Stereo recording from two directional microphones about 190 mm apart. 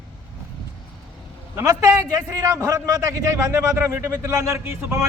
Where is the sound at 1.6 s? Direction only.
15° right (ahead or behind).